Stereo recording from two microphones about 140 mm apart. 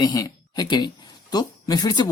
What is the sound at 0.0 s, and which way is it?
Speech, 25° left (ahead or behind).